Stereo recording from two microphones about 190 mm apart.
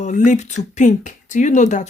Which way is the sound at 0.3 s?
40° left (ahead or behind).